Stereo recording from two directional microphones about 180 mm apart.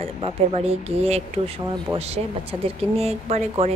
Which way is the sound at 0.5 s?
35° right (ahead or behind).